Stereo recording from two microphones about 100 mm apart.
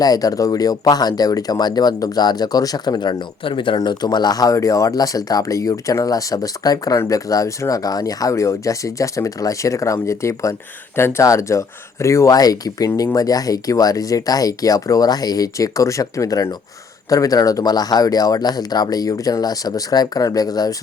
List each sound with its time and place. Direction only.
0.0 s speech: 40° left (ahead or behind); by 3.8 s 55° left (ahead or behind)
3.8 s speech: 45° left (ahead or behind)